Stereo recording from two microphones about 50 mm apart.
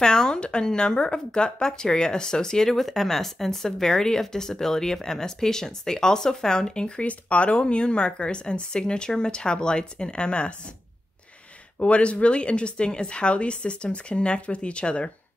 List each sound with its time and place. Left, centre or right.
0.0 s a woman's voice: centre
11.8 s a woman's voice: left